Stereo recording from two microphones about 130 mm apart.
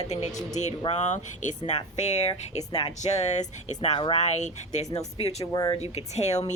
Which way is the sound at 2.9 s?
60° left (ahead or behind).